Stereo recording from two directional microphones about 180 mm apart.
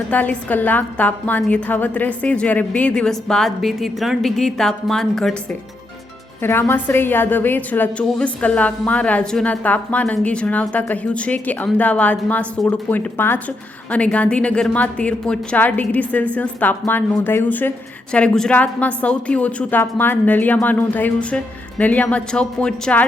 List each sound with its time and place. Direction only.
0.1 s a woman's voice: 10° left (ahead or behind)
6.4 s a woman's voice: 10° left (ahead or behind)